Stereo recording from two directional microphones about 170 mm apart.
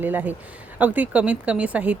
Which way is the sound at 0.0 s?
10° right (ahead or behind).